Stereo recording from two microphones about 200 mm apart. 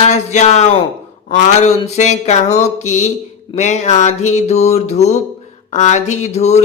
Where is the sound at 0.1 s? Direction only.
35° left (ahead or behind).